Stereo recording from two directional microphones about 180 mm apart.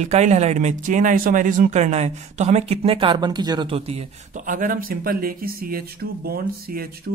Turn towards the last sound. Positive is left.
turn(degrees=-55)  # may be behind; listen again after turning